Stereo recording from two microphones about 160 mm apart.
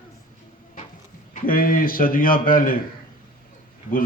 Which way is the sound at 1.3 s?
60° left (ahead or behind).